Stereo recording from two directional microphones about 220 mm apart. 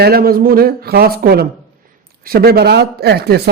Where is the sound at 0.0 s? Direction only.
45° right (ahead or behind).